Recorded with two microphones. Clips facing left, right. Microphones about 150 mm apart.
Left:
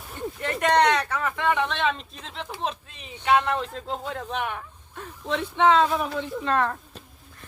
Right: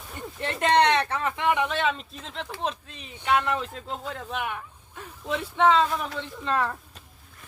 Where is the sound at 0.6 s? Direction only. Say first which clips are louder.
Even; 30° right (ahead or behind).